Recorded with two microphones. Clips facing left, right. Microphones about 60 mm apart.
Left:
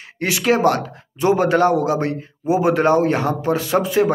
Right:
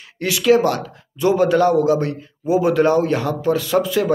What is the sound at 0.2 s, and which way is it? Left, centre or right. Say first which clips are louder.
A man's voice: right 1 dB; left.